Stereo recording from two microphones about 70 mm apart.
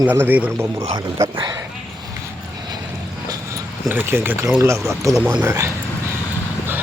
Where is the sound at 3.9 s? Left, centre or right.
Right.